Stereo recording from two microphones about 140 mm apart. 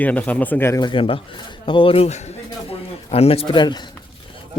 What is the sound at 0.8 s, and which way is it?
A man's voice, 35° left (ahead or behind).